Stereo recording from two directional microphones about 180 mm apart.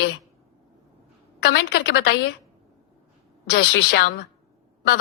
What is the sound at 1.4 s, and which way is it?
Speech, 60° left (ahead or behind).